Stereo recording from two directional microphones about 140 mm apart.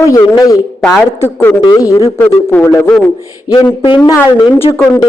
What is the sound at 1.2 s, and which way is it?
A man's voice, 15° left (ahead or behind).